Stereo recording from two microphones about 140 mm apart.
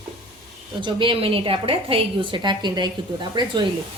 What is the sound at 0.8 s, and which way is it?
A woman's voice, 35° right (ahead or behind).